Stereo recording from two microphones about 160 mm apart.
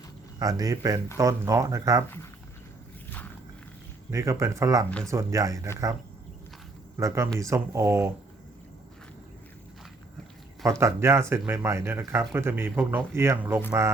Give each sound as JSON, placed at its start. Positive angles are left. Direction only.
{"t": 0.3, "sound": "speech", "side_deg": -25}
{"t": 4.1, "sound": "speech", "side_deg": -20}
{"t": 6.9, "sound": "speech", "side_deg": -20}
{"t": 10.6, "sound": "speech", "side_deg": -20}